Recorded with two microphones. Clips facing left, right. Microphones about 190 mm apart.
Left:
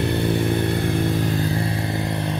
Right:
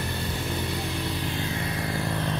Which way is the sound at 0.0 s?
65° left (ahead or behind).